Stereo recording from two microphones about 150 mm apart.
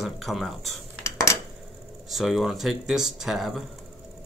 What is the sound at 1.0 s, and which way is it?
Cutlery, 20° left (ahead or behind).